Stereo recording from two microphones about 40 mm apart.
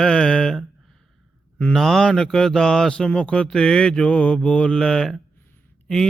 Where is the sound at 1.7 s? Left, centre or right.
Centre.